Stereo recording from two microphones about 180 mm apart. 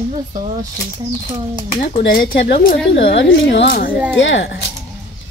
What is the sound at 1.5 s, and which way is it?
Speech, 35° left (ahead or behind).